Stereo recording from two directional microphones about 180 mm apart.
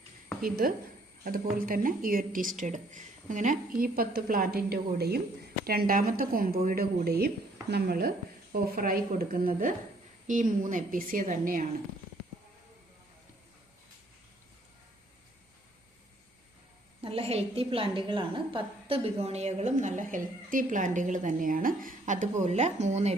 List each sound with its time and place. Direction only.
0.4 s a woman's voice: 55° right (ahead or behind)
17.0 s a woman's voice: 30° right (ahead or behind)